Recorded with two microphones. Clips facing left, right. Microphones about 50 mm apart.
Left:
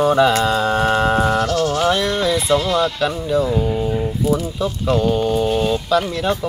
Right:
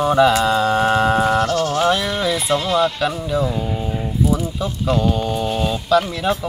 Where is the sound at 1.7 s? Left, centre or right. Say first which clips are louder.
Even; centre.